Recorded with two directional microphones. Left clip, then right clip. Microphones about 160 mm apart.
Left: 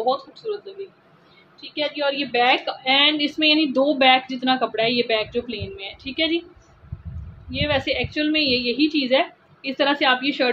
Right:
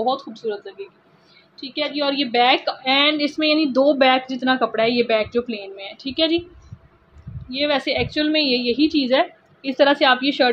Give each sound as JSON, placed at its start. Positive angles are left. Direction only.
{"t": 0.0, "sound": "speech", "side_deg": -55}
{"t": 1.6, "sound": "a woman's voice", "side_deg": -55}
{"t": 3.3, "sound": "speech", "side_deg": -25}
{"t": 7.5, "sound": "speech", "side_deg": -40}